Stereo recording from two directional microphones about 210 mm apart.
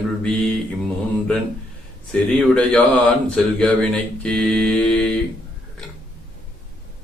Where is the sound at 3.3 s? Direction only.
5° left (ahead or behind).